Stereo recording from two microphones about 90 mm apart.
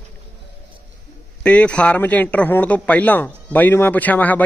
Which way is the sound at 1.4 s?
15° left (ahead or behind).